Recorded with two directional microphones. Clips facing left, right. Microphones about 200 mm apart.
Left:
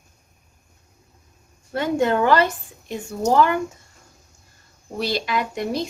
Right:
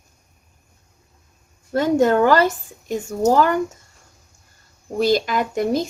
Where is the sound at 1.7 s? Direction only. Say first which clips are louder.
Right 4 dB; 40° right (ahead or behind).